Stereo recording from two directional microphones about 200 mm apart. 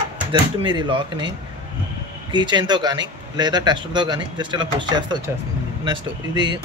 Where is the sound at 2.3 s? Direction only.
20° right (ahead or behind).